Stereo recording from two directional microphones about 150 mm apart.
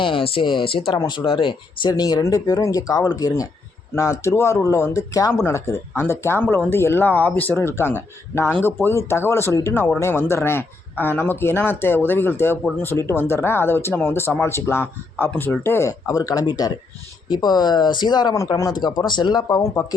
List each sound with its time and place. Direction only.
0.0 s speech: 35° left (ahead or behind)